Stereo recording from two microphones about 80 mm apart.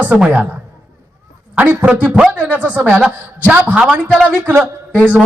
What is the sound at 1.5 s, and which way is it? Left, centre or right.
A man's voice, centre.